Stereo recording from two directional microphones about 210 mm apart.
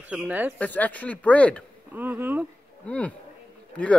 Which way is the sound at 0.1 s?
5° right (ahead or behind).